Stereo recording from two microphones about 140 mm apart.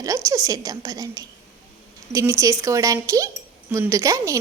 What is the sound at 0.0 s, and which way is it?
A woman's voice, 25° right (ahead or behind).